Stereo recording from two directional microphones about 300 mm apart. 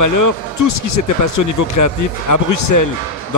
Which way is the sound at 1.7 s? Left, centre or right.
Left.